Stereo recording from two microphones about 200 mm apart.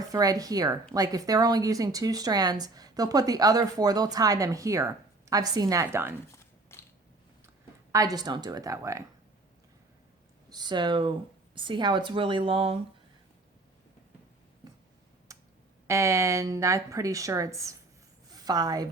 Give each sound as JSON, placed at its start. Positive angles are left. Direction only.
{"t": 0.0, "sound": "speech", "side_deg": -20}
{"t": 6.7, "sound": "biting", "side_deg": 15}
{"t": 7.9, "sound": "speech", "side_deg": -20}
{"t": 10.5, "sound": "speech", "side_deg": -20}
{"t": 15.3, "sound": "music", "side_deg": -15}
{"t": 15.9, "sound": "speech", "side_deg": -15}
{"t": 18.3, "sound": "a sound", "side_deg": -20}